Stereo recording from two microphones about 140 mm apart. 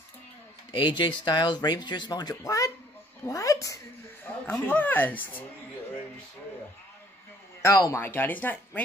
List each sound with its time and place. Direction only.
0.7 s a woman's voice: 35° left (ahead or behind); by 5.4 s 15° left (ahead or behind)
7.6 s speech: 20° left (ahead or behind)